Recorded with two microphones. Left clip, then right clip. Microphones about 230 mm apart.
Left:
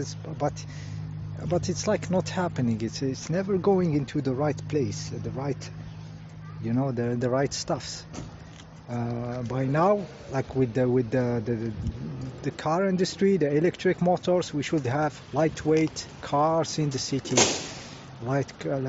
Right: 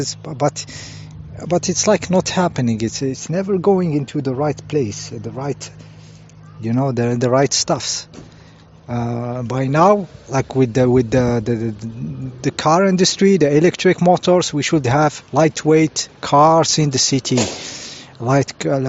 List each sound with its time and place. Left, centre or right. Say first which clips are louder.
0.0 s speech: right 10 dB; right